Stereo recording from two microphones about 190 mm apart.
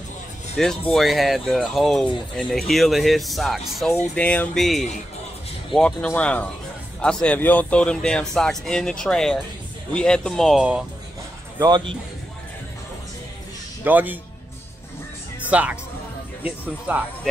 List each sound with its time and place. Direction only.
0.6 s speech: centre (ahead or behind)
11.6 s speech: 25° right (ahead or behind)
13.8 s speech: 10° right (ahead or behind)
15.5 s speech: 5° right (ahead or behind)